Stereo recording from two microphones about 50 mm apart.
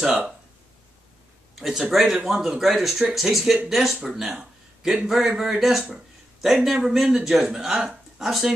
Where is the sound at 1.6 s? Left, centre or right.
Centre.